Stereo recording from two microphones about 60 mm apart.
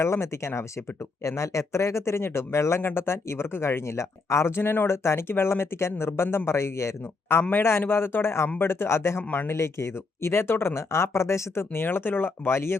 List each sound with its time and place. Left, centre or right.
0.0 s speech: left